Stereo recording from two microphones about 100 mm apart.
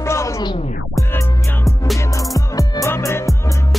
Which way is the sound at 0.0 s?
30° left (ahead or behind).